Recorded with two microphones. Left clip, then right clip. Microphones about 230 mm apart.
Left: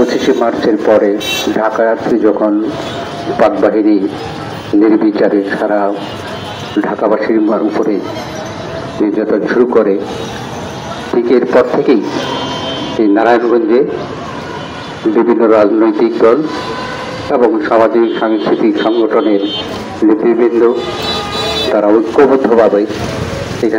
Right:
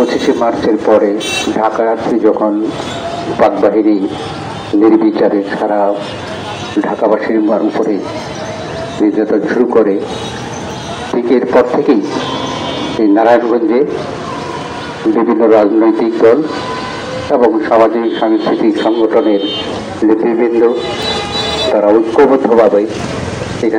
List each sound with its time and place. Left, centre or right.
0.1 s a man's voice: left
9.3 s a man's voice: left
11.2 s a man's voice: left
13.1 s a man's voice: left
15.1 s a man's voice: left
21.7 s a man's voice: left